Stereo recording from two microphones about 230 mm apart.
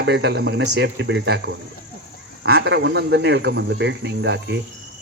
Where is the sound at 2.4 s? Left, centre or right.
Right.